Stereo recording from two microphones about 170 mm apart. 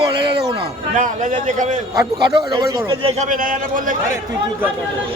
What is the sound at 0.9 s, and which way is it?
Speech, 45° right (ahead or behind).